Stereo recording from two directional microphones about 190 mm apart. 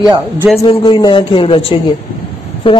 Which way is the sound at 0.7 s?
25° left (ahead or behind).